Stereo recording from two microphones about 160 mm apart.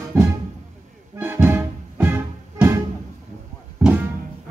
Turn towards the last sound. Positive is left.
turn(degrees=-10)  # may be behind; listen again after turning